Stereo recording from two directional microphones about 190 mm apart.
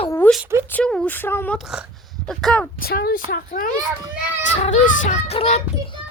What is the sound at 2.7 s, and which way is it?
Speech, 55° left (ahead or behind).